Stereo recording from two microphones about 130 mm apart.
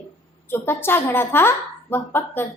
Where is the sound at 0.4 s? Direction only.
15° left (ahead or behind).